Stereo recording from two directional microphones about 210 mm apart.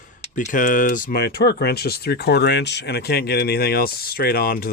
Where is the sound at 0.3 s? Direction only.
40° left (ahead or behind).